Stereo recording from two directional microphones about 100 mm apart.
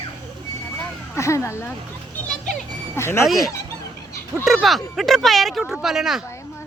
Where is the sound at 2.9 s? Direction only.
25° left (ahead or behind).